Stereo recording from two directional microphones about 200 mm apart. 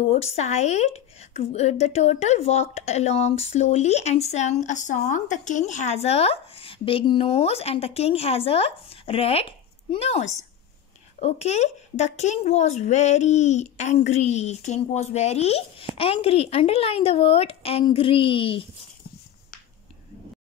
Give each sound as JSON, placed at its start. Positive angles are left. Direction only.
{"t": 0.1, "sound": "a woman's voice", "side_deg": 30}